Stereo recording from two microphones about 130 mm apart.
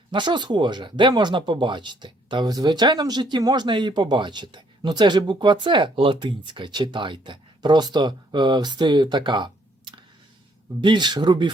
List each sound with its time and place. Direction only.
0.1 s speech: 35° right (ahead or behind)